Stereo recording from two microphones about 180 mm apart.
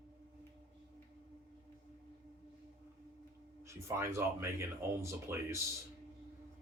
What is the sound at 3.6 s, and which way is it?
Speech, 15° right (ahead or behind).